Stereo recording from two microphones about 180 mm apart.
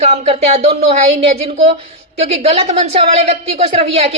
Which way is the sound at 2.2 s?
35° right (ahead or behind).